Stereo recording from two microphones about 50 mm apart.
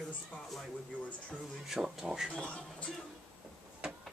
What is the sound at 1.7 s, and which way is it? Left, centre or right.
Speech, centre.